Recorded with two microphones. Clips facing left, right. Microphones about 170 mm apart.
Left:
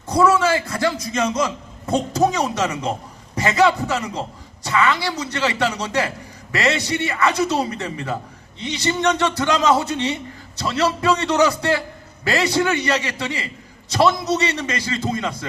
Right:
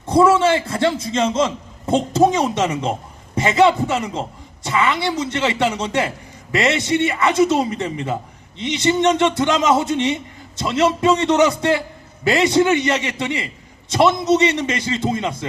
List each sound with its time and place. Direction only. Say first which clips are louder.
0.1 s a man's voice: right 3 dB; 25° right (ahead or behind)